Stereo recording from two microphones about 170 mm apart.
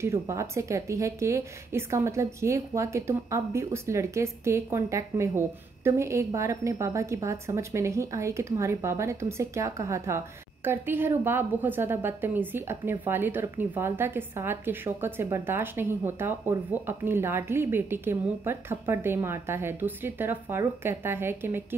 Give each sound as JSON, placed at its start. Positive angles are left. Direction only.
{"t": 0.0, "sound": "a woman's voice", "side_deg": -15}